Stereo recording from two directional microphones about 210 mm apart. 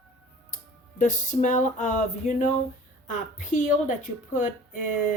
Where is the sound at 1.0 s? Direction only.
35° left (ahead or behind).